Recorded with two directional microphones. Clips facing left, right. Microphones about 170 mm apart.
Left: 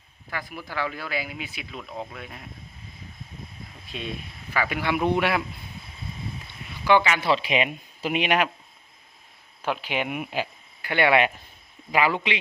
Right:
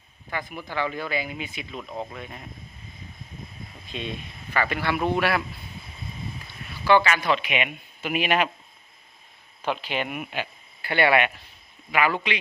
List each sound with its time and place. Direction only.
0.3 s speech: centre (ahead or behind)
3.9 s a man's voice: 5° left (ahead or behind); by 5.4 s 20° left (ahead or behind)
6.8 s a man's voice: 15° left (ahead or behind)
7.3 s speech: 30° left (ahead or behind)
8.2 s a man's voice: 15° left (ahead or behind)
9.6 s speech: 5° left (ahead or behind); by 12.4 s 20° left (ahead or behind)